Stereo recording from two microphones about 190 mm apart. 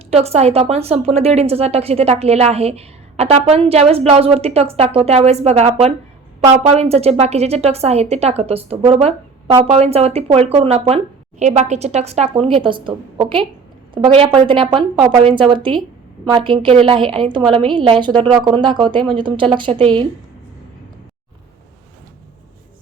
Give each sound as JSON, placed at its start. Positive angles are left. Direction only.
{"t": 0.1, "sound": "a woman's voice", "side_deg": -35}